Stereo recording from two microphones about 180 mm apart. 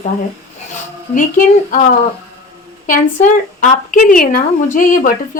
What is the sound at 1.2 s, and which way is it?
Speech, 50° left (ahead or behind).